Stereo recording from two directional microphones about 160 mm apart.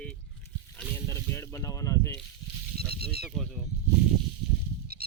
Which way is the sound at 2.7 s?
80° right.